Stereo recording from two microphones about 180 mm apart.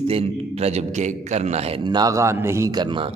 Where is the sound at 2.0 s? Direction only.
15° right (ahead or behind).